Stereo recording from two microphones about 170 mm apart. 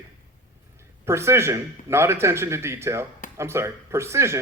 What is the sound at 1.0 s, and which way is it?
Speech, 15° right (ahead or behind).